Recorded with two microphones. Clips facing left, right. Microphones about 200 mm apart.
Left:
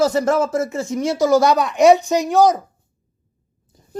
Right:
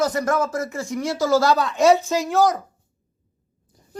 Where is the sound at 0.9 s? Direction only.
20° left (ahead or behind).